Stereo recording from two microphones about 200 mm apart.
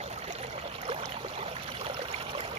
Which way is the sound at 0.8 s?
30° right (ahead or behind).